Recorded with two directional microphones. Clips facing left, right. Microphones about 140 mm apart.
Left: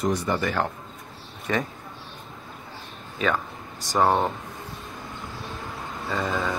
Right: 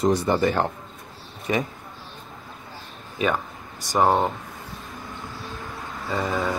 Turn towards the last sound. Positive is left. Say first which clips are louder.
# right 2 dB
turn(degrees=-20)  # may be behind; listen again after turning